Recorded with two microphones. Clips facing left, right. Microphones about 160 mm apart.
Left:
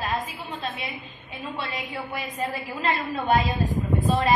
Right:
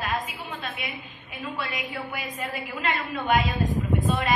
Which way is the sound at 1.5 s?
25° left (ahead or behind).